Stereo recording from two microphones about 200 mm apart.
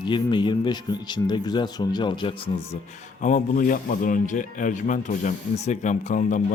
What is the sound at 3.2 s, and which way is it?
Speech, 40° left (ahead or behind).